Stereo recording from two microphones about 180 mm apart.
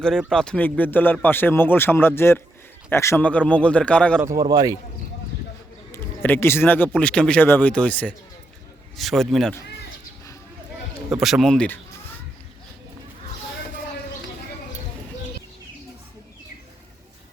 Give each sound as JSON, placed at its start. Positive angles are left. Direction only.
{"t": 0.3, "sound": "a man's voice", "side_deg": 5}
{"t": 4.2, "sound": "speech", "side_deg": -20}
{"t": 5.9, "sound": "a man's voice", "side_deg": 10}
{"t": 11.1, "sound": "speech", "side_deg": 0}